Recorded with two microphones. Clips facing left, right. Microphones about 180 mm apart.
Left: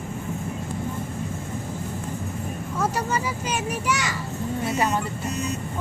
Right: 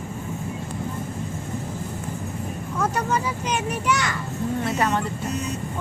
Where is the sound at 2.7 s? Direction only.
10° left (ahead or behind).